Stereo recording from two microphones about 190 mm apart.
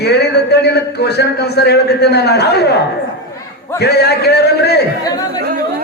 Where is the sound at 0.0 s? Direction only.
60° left (ahead or behind).